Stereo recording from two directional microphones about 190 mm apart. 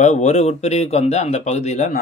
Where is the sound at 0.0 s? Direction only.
40° left (ahead or behind).